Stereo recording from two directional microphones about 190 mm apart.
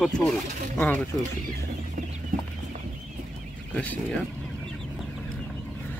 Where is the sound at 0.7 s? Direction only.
10° left (ahead or behind).